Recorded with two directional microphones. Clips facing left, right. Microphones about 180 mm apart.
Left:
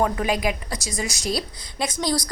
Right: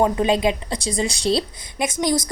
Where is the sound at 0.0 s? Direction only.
25° right (ahead or behind).